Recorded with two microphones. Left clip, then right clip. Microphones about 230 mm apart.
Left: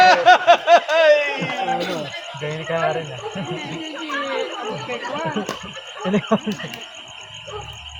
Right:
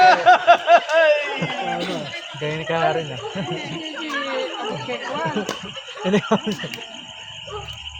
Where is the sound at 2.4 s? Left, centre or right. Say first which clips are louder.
Right 1 dB; right.